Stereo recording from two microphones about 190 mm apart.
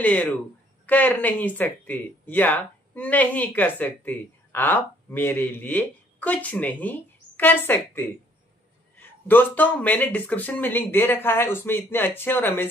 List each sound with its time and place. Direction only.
0.0 s speech: 10° left (ahead or behind)
9.3 s speech: 10° left (ahead or behind)